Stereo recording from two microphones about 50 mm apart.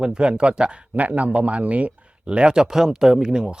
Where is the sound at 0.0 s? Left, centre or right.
Centre.